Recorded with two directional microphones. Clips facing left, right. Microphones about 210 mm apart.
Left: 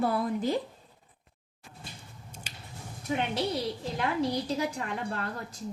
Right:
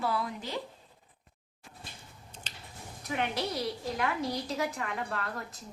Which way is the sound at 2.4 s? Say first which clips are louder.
Left 2 dB; 10° left (ahead or behind).